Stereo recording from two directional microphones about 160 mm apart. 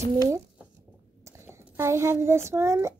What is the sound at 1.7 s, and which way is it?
Speech, 15° right (ahead or behind).